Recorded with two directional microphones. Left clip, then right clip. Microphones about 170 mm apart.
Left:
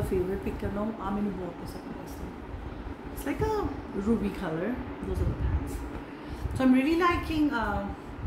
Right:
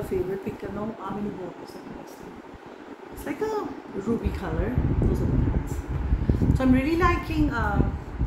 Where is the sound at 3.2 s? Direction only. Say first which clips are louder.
Right 1 dB; 10° left (ahead or behind).